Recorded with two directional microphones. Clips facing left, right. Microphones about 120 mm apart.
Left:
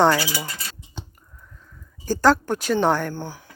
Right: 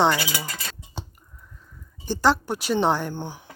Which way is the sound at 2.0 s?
Centre (ahead or behind).